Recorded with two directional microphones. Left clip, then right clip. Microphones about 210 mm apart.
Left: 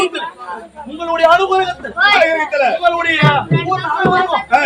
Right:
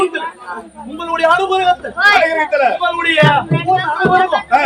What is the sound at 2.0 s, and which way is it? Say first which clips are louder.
Speech: left 1 dB; 10° right (ahead or behind).